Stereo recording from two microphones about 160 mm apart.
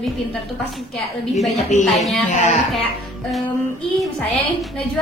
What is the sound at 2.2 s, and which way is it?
Speech, 45° left (ahead or behind).